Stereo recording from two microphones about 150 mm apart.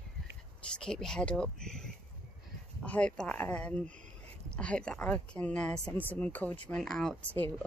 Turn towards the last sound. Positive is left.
turn(degrees=10)  # may be behind; listen again after turning